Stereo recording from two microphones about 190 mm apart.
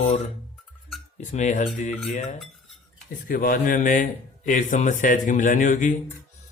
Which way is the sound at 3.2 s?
45° left (ahead or behind).